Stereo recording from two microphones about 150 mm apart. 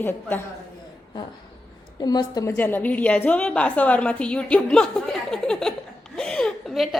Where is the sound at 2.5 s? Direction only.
15° left (ahead or behind).